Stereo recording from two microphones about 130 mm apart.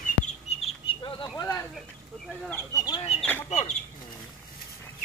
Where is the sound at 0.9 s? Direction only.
40° left (ahead or behind).